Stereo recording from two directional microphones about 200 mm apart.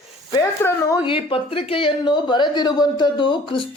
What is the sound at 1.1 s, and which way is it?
A woman's voice, 25° left (ahead or behind).